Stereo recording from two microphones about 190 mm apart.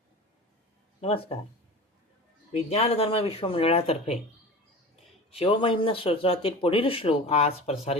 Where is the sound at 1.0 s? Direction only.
30° left (ahead or behind).